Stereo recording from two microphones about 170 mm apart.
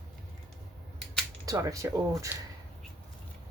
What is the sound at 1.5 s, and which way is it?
Speech, 20° right (ahead or behind).